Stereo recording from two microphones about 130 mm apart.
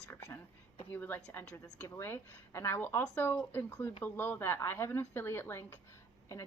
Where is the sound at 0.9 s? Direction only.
15° left (ahead or behind).